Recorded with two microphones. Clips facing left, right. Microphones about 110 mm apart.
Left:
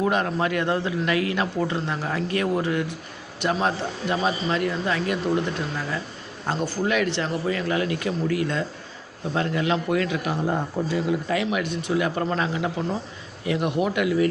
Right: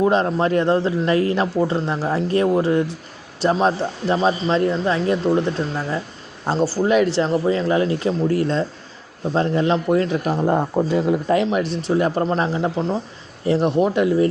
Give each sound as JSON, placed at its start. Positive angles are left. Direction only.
{"t": 0.0, "sound": "a man's voice", "side_deg": -30}
{"t": 11.5, "sound": "a man's voice", "side_deg": -35}
{"t": 12.2, "sound": "a man's voice", "side_deg": -20}